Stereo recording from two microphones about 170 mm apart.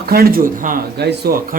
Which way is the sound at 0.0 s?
60° right (ahead or behind).